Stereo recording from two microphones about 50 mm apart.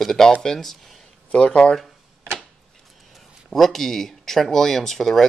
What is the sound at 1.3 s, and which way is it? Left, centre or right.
Speech, left.